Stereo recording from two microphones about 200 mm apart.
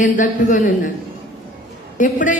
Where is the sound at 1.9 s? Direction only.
40° left (ahead or behind).